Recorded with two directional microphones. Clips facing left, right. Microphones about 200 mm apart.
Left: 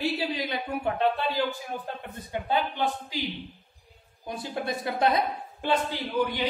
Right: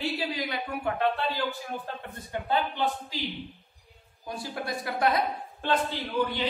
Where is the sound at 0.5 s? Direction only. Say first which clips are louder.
Left 2 dB; 20° left (ahead or behind).